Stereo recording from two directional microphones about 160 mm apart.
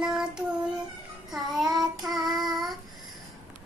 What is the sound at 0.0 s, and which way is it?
Child singing, 5° right (ahead or behind).